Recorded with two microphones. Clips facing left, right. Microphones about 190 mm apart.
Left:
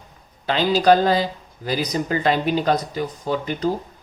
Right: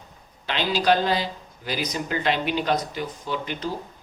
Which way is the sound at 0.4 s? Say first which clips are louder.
Left 6 dB; 40° left (ahead or behind).